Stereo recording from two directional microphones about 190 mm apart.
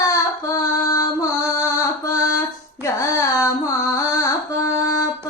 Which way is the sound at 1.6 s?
15° left (ahead or behind).